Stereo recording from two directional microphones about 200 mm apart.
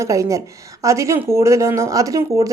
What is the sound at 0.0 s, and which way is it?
Speech, 15° right (ahead or behind).